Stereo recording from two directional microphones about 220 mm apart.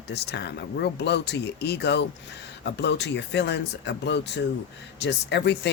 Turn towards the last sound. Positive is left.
turn(degrees=50)  # may be behind; listen again after turning